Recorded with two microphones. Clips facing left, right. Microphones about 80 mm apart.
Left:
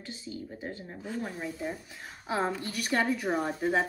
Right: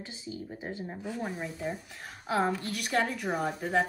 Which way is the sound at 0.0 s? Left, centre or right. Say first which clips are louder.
Even; centre.